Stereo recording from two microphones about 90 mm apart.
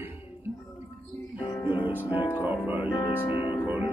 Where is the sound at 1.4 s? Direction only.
45° left (ahead or behind).